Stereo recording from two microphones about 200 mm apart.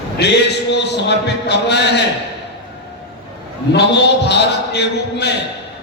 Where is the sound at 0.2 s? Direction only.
60° left (ahead or behind).